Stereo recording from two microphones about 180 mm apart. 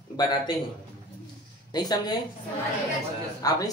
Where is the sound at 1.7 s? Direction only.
20° left (ahead or behind).